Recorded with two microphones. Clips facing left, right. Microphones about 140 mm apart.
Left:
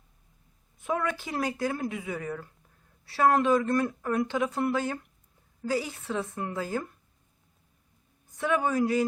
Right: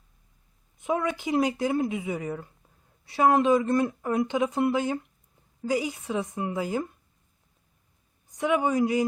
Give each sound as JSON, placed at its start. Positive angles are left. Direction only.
{"t": 0.8, "sound": "a woman's voice", "side_deg": -20}
{"t": 8.3, "sound": "a woman's voice", "side_deg": -15}